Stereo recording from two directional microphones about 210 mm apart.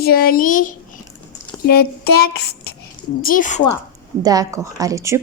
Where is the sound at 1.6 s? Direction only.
50° left (ahead or behind).